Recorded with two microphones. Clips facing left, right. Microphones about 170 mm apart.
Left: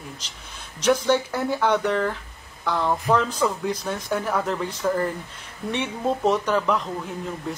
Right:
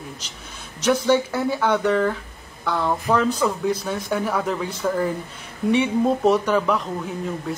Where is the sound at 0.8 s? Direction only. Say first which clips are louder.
Right 1 dB; 5° right (ahead or behind).